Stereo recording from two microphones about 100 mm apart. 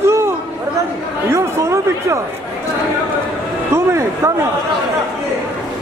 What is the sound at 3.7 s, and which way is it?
Speech, 25° right (ahead or behind).